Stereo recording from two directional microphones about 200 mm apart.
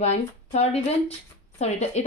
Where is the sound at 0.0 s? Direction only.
35° left (ahead or behind).